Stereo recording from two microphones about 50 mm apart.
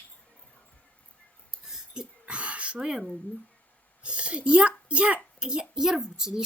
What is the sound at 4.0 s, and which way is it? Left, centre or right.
A child's voice, right.